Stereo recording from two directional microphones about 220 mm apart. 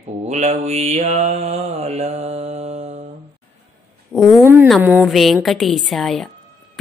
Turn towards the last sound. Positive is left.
turn(degrees=0)  # may be behind; listen again after turning